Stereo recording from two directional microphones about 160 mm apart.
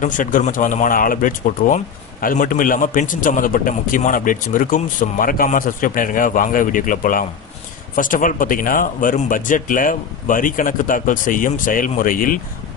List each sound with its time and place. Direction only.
0.0 s a man's voice: 55° left (ahead or behind)